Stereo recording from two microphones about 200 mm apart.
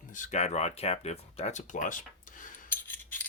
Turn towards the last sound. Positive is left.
turn(degrees=10)  # may be behind; listen again after turning